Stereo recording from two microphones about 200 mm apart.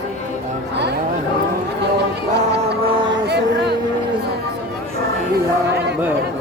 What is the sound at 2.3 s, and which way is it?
Music, 55° right (ahead or behind).